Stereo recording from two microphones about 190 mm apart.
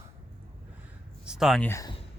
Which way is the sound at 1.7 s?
15° left (ahead or behind).